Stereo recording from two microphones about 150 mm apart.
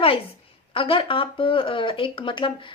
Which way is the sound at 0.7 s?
35° left (ahead or behind).